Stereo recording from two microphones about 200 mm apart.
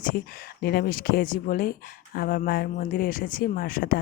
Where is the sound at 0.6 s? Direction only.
50° left (ahead or behind).